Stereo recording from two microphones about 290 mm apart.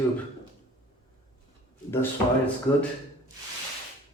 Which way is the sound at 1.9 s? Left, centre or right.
Centre.